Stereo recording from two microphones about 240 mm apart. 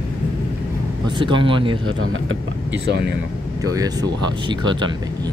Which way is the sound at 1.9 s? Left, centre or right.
Right.